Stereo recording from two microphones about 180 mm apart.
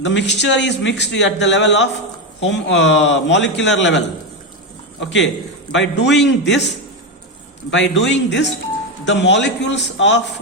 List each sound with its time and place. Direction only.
0.0 s speech: 80° left
5.7 s a man's voice: 75° left (ahead or behind)
7.7 s a man's voice: 80° left